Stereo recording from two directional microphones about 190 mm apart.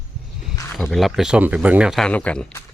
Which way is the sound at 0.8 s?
Centre (ahead or behind).